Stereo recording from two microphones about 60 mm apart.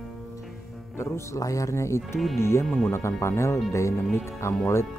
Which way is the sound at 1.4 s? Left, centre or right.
Left.